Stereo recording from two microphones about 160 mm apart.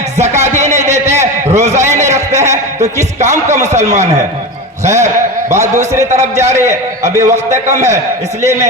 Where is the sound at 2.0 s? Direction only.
20° right (ahead or behind).